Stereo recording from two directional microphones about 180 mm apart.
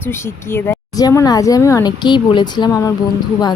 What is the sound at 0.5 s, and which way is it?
A woman's voice, 15° left (ahead or behind).